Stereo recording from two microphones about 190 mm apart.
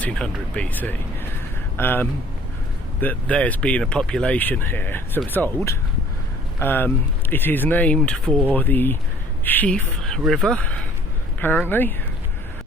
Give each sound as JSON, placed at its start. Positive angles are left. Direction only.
{"t": 0.0, "sound": "speech", "side_deg": 5}